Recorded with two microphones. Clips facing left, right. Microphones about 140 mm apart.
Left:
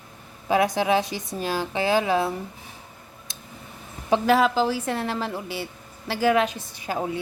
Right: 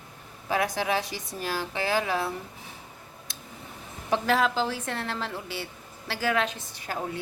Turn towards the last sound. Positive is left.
turn(degrees=15)  # may be behind; listen again after turning